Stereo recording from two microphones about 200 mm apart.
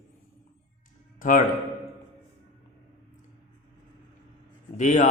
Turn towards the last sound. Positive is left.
turn(degrees=35)  # may be behind; listen again after turning